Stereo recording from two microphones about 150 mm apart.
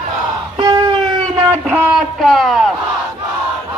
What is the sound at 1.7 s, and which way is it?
Speech, 15° right (ahead or behind).